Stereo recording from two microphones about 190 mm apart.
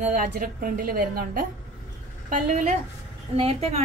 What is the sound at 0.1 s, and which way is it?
A woman's voice, 45° right (ahead or behind).